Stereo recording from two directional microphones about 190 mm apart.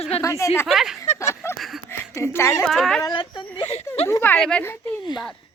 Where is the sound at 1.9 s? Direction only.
15° left (ahead or behind).